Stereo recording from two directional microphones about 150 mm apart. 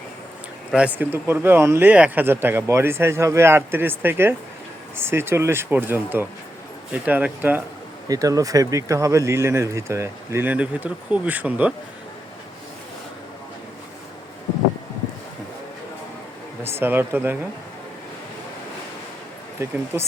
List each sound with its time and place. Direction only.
0.7 s speech: 10° right (ahead or behind)
8.0 s speech: 25° right (ahead or behind)
16.8 s speech: 15° right (ahead or behind)
19.5 s speech: 15° right (ahead or behind)